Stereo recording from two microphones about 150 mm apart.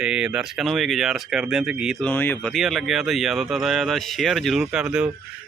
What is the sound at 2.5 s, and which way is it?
Speech, centre (ahead or behind).